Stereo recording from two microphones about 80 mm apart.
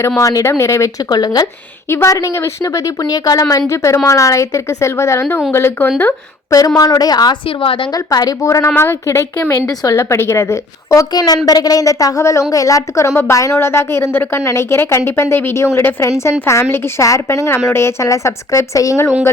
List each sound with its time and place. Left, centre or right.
0.2 s a woman's voice: left
1.1 s a woman's voice: left
1.9 s a woman's voice: left
6.7 s a woman's voice: left
7.9 s a woman's voice: left
8.4 s a woman's voice: left
9.6 s a woman's voice: left
10.8 s a woman's voice: left